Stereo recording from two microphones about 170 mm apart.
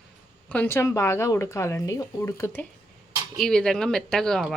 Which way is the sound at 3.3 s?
Centre (ahead or behind).